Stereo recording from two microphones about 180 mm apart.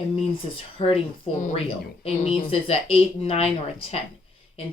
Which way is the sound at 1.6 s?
35° left (ahead or behind).